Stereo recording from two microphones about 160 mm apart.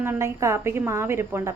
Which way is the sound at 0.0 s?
15° right (ahead or behind).